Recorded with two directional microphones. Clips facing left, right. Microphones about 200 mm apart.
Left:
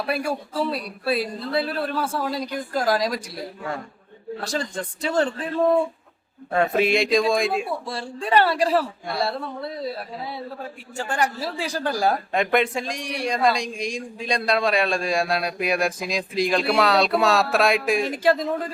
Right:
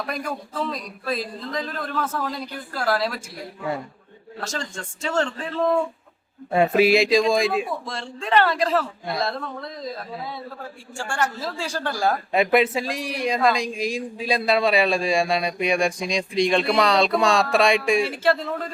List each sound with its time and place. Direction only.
0.0 s speech: 10° left (ahead or behind)
3.2 s speech: 35° left (ahead or behind)
4.7 s speech: 35° left (ahead or behind)
5.0 s speech: 15° left (ahead or behind)
6.5 s speech: 10° right (ahead or behind)
7.7 s speech: 10° left (ahead or behind)
12.3 s speech: 5° right (ahead or behind)
18.0 s speech: 15° left (ahead or behind)